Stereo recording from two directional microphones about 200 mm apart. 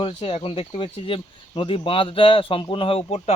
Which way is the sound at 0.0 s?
30° left (ahead or behind).